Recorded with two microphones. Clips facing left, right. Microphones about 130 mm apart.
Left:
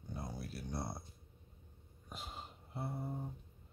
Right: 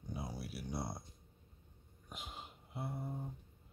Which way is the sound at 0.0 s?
10° right (ahead or behind).